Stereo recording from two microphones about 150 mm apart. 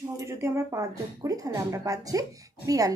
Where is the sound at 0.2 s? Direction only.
20° right (ahead or behind).